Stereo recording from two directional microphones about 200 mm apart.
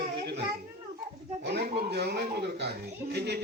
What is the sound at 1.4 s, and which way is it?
A man's voice, 55° right (ahead or behind).